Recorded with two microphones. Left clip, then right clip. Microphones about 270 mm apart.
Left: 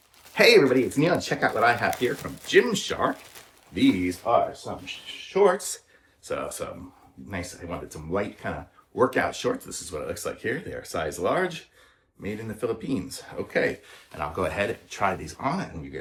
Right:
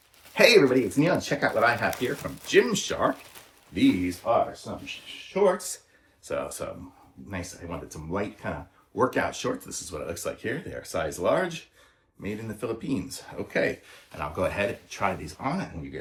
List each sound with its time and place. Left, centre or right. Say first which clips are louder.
0.3 s speech: left 1 dB; centre
4.2 s speech: left 2 dB; centre
6.2 s speech: even; centre